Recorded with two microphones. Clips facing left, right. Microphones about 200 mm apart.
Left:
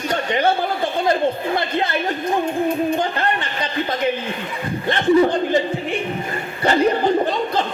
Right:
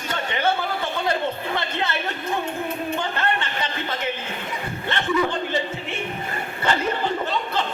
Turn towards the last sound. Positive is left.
turn(degrees=40)  # may be behind; listen again after turning